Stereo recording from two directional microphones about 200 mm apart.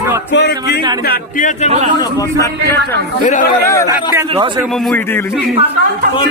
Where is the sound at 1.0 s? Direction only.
45° left (ahead or behind).